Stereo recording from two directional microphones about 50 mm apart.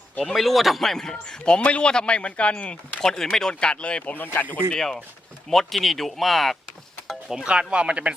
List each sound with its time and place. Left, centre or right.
0.3 s a man's voice: centre; by 2.7 s left
3.0 s speech: centre
4.1 s speech: left
4.7 s a man's voice: centre
7.3 s speech: centre